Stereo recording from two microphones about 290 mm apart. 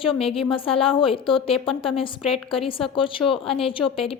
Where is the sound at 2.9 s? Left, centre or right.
Centre.